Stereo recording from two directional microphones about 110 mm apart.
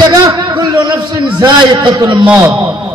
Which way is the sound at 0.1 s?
35° right (ahead or behind).